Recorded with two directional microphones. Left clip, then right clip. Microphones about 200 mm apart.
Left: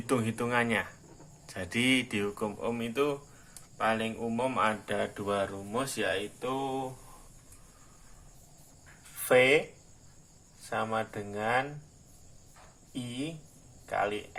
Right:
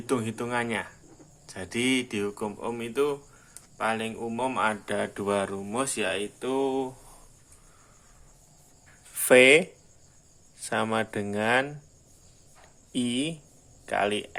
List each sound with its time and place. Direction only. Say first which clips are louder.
0.0 s speech: right 1 dB; 10° right (ahead or behind); by 6.8 s 45° right (ahead or behind)
9.2 s speech: right 6 dB; 50° right (ahead or behind)
10.7 s speech: right 5 dB; 50° right (ahead or behind)
12.9 s speech: right 9 dB; 50° right (ahead or behind)